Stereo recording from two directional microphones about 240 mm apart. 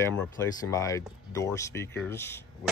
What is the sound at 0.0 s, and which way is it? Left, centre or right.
Speech, centre.